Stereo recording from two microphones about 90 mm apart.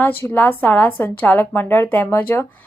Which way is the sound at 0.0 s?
20° left (ahead or behind).